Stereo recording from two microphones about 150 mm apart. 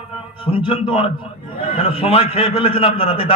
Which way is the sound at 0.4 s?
35° left (ahead or behind).